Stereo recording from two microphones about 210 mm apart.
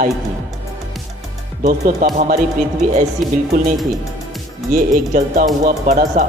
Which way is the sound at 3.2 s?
Centre (ahead or behind).